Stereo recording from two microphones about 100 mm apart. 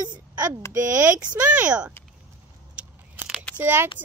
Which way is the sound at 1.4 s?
10° right (ahead or behind).